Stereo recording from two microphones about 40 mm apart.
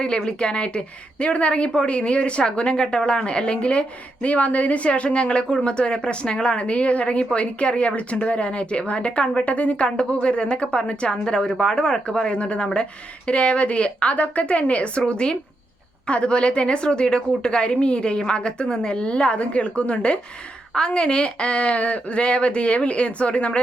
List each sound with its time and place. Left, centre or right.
0.3 s speech: left